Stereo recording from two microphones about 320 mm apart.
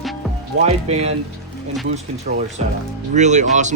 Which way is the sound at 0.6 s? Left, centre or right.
Centre.